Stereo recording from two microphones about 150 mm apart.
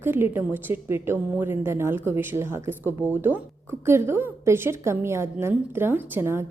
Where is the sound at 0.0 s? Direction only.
15° right (ahead or behind).